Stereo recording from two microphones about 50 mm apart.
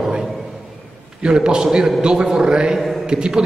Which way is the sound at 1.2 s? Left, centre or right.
Centre.